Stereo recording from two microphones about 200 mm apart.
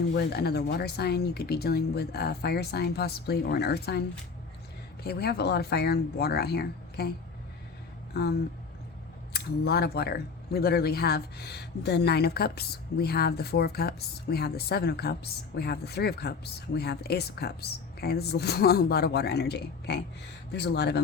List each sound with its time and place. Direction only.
0.2 s speech: 55° left (ahead or behind)
5.0 s speech: 55° left (ahead or behind)
8.1 s speech: 55° left (ahead or behind)
9.3 s speech: 55° left (ahead or behind)